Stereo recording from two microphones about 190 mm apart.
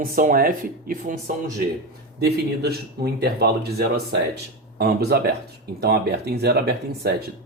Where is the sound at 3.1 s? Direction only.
55° right (ahead or behind).